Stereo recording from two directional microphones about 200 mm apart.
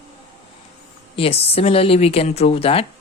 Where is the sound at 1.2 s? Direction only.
30° left (ahead or behind).